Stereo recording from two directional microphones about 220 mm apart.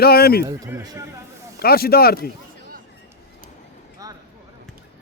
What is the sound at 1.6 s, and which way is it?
Speech, 45° left (ahead or behind).